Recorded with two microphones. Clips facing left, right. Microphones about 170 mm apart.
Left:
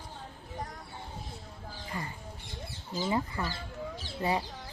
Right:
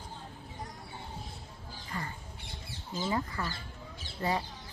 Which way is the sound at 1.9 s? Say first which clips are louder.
Even; 15° left (ahead or behind).